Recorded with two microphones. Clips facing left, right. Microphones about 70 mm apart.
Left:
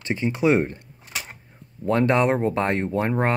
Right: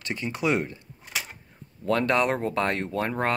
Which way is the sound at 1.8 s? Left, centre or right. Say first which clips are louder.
Left 4 dB; left.